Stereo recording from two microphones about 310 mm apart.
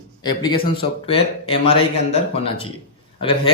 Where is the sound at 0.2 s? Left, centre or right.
Centre.